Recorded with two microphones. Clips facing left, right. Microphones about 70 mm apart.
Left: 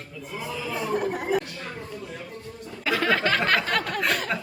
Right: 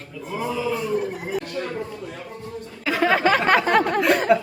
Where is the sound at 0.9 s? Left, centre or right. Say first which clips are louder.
Even; left.